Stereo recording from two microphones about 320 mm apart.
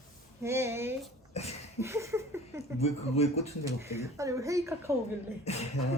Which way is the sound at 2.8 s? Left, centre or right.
Centre.